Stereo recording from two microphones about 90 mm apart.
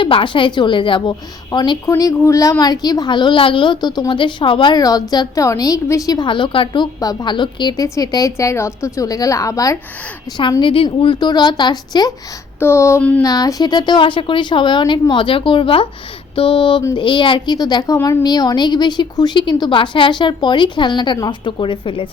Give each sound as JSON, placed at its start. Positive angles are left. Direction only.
{"t": 0.0, "sound": "a woman's voice", "side_deg": 75}
{"t": 2.3, "sound": "a woman's voice", "side_deg": 40}
{"t": 4.8, "sound": "a woman's voice", "side_deg": 45}
{"t": 6.2, "sound": "a woman's voice", "side_deg": 65}
{"t": 7.0, "sound": "a woman's voice", "side_deg": 45}
{"t": 7.8, "sound": "a woman's voice", "side_deg": 45}
{"t": 10.6, "sound": "speech", "side_deg": 75}
{"t": 11.0, "sound": "a woman's voice", "side_deg": 60}
{"t": 12.5, "sound": "speech", "side_deg": 30}
{"t": 13.0, "sound": "a sound", "side_deg": 15}
{"t": 13.2, "sound": "a woman's voice", "side_deg": 40}